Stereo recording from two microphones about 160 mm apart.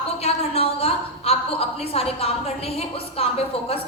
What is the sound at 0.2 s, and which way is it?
A woman's voice, 40° left (ahead or behind).